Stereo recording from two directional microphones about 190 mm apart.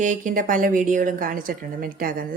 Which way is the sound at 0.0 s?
45° right (ahead or behind).